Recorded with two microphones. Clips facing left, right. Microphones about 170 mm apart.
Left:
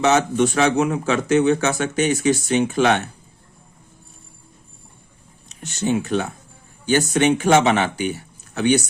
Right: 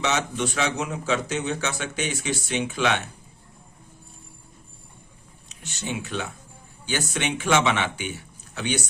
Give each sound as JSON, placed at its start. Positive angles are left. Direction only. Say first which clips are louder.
{"t": 0.0, "sound": "speech", "louder": "left 9 dB", "side_deg": 45}
{"t": 5.5, "sound": "speech", "louder": "left 11 dB", "side_deg": 45}